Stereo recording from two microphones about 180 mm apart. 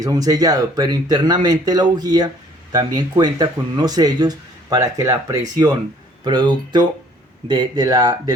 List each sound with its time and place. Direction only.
0.0 s speech: 20° right (ahead or behind)